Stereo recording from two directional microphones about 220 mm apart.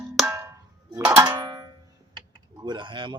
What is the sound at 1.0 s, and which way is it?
Speech, 10° right (ahead or behind).